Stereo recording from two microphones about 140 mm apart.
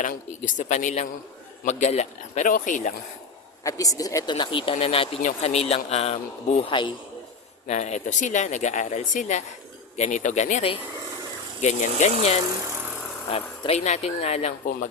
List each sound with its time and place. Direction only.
0.0 s speech: 60° left (ahead or behind)
3.6 s speech: 25° left (ahead or behind)
7.7 s speech: 55° left (ahead or behind)
11.6 s speech: 60° left (ahead or behind)